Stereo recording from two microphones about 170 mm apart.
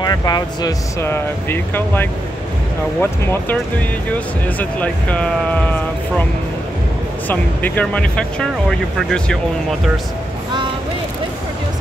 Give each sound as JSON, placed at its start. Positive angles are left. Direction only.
{"t": 0.0, "sound": "speech", "side_deg": 25}
{"t": 7.2, "sound": "speech", "side_deg": 10}